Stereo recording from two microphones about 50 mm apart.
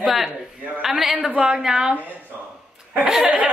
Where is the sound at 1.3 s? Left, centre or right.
Centre.